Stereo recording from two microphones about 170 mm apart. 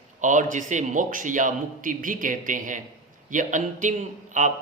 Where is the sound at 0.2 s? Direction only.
45° right (ahead or behind).